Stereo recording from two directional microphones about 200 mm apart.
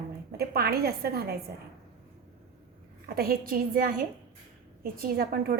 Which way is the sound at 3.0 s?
50° right (ahead or behind).